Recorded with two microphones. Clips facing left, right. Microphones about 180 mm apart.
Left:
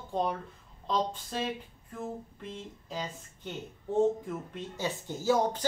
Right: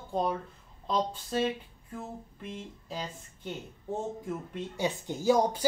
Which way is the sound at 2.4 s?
5° right (ahead or behind).